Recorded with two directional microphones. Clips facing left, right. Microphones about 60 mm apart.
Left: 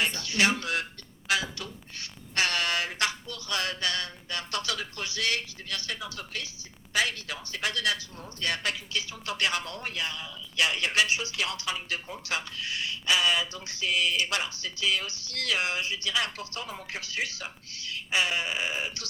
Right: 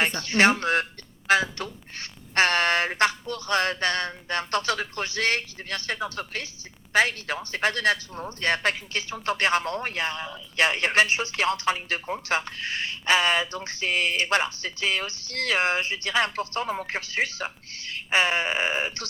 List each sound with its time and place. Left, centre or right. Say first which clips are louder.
0.0 s speech: right 6 dB; right